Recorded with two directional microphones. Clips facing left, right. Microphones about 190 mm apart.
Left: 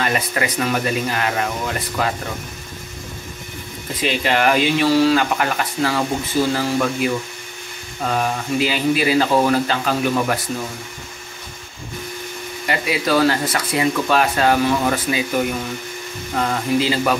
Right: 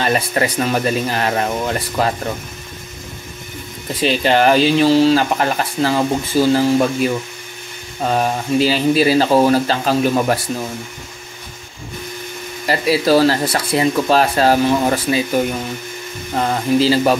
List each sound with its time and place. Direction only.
0.0 s speech: 35° right (ahead or behind)
4.0 s speech: 30° right (ahead or behind)
8.1 s speech: 35° right (ahead or behind)
12.6 s speech: 35° right (ahead or behind)